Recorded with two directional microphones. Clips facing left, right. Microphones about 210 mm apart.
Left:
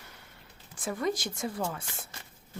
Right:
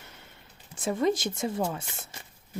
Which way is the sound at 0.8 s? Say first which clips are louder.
Right 5 dB; 25° right (ahead or behind).